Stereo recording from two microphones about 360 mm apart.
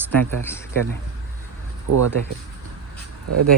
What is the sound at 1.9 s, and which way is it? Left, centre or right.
Speech, right.